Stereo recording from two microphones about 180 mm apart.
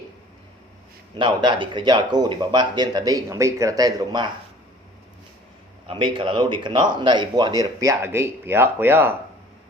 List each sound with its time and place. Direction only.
1.1 s speech: 25° right (ahead or behind)
5.9 s speech: 30° right (ahead or behind); by 9.1 s 10° right (ahead or behind)